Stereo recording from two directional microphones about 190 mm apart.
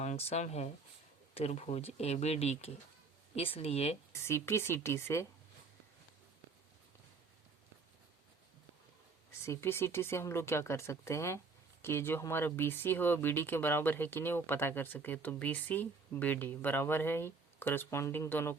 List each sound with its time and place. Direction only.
0.0 s speech: 35° left (ahead or behind)
4.1 s speech: 15° left (ahead or behind)
9.4 s speech: 15° left (ahead or behind)